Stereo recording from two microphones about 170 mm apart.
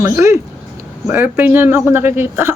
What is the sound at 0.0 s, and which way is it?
Speech, 15° right (ahead or behind).